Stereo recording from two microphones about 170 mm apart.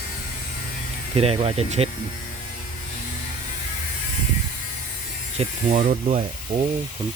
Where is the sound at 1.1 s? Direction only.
35° right (ahead or behind).